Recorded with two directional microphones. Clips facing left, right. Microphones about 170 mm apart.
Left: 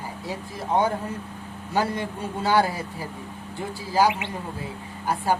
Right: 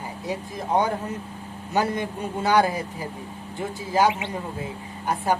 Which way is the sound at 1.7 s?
20° right (ahead or behind).